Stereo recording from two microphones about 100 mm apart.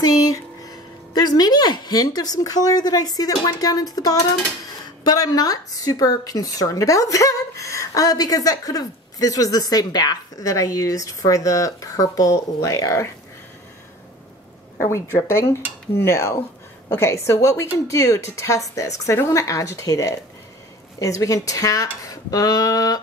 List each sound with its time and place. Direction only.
0.0 s a woman's voice: 40° left (ahead or behind)
15.1 s a woman's voice: 25° left (ahead or behind)